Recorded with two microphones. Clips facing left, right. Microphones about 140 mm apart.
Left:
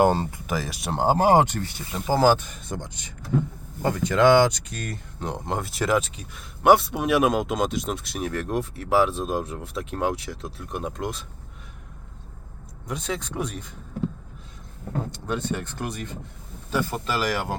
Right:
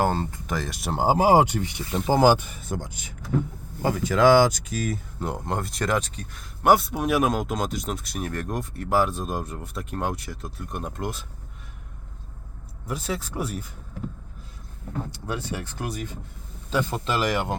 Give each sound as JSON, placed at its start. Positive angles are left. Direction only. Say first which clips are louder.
{"t": 0.0, "sound": "speech", "louder": "left 4 dB", "side_deg": 15}
{"t": 12.9, "sound": "speech", "louder": "even", "side_deg": -5}
{"t": 15.1, "sound": "speech", "louder": "left 4 dB", "side_deg": -10}
{"t": 16.6, "sound": "speech", "louder": "right 1 dB", "side_deg": -20}